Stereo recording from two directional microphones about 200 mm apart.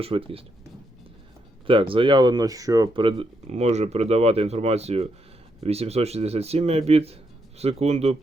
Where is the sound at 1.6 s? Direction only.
25° right (ahead or behind).